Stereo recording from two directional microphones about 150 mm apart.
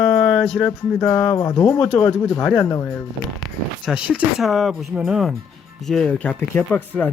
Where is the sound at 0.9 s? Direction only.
15° left (ahead or behind).